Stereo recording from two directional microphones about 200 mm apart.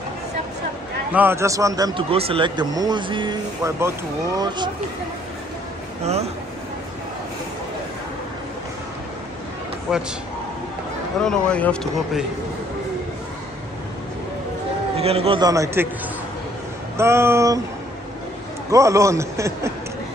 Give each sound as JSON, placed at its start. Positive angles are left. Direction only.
{"t": 1.1, "sound": "a man's voice", "side_deg": -10}
{"t": 6.0, "sound": "speech", "side_deg": -30}
{"t": 9.9, "sound": "speech", "side_deg": -5}
{"t": 11.1, "sound": "speech", "side_deg": 5}
{"t": 15.0, "sound": "a man's voice", "side_deg": -30}
{"t": 16.9, "sound": "a man's voice", "side_deg": -15}
{"t": 18.7, "sound": "a man's voice", "side_deg": -15}